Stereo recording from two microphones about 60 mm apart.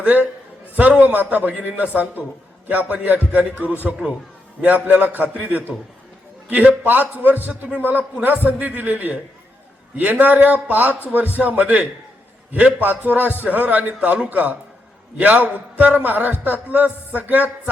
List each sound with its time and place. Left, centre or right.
0.0 s a man's voice: right